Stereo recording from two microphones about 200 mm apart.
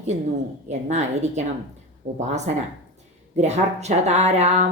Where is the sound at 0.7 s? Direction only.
35° right (ahead or behind).